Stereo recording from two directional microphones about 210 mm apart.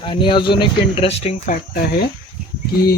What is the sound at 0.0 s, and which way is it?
Speech, 25° left (ahead or behind).